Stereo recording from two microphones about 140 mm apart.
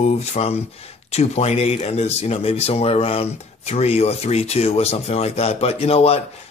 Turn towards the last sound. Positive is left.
turn(degrees=45)  # may be behind; listen again after turning